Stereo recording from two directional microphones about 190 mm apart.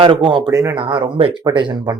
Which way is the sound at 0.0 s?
25° right (ahead or behind).